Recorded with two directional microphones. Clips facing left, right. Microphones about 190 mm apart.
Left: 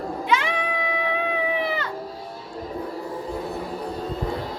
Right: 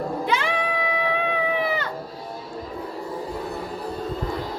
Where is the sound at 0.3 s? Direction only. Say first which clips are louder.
Left 3 dB; 35° right (ahead or behind).